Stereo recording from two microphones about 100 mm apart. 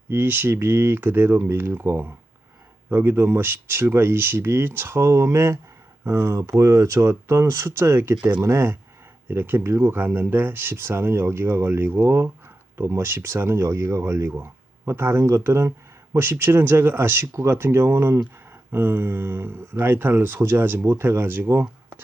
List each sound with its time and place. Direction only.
0.1 s speech: 20° right (ahead or behind)
8.1 s speech: 15° right (ahead or behind)
8.4 s speech: 30° right (ahead or behind)